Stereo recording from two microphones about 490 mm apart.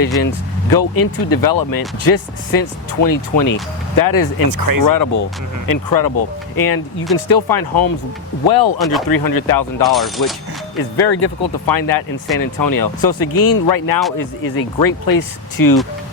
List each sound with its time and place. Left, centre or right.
0.2 s speech: left
4.4 s speech: right
5.6 s speech: left
8.8 s speech: centre
9.0 s speech: left
9.8 s speech: centre
10.9 s speech: left